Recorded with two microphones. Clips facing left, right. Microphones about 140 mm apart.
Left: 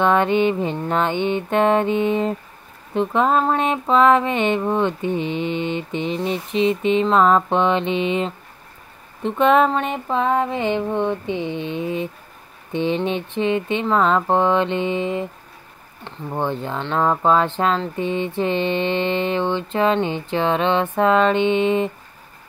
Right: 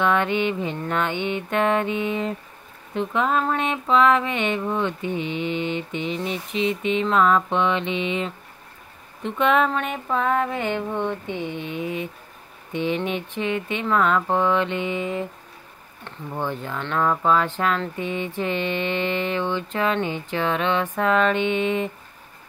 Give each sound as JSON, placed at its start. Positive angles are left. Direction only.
{"t": 0.0, "sound": "mantra", "side_deg": 35}